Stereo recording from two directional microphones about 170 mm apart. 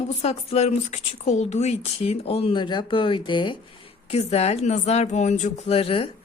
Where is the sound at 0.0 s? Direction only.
40° left (ahead or behind).